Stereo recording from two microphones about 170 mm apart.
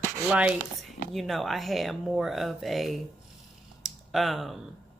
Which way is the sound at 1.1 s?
Centre (ahead or behind).